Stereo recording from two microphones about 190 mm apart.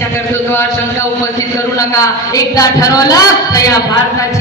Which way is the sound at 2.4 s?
20° left (ahead or behind).